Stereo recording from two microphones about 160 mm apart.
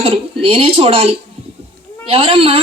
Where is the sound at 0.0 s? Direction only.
35° right (ahead or behind).